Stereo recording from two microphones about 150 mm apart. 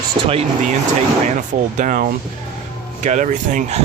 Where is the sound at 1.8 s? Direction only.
60° right (ahead or behind).